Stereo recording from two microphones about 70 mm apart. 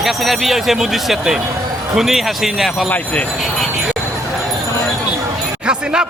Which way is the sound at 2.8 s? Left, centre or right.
Left.